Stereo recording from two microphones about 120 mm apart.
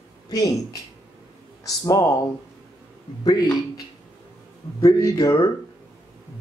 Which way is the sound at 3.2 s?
35° left (ahead or behind).